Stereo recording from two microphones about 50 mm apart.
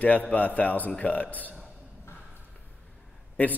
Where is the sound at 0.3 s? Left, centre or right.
Left.